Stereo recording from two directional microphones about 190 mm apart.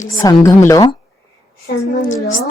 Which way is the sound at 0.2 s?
20° left (ahead or behind).